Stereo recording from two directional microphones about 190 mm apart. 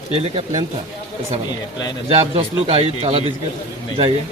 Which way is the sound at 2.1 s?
30° right (ahead or behind).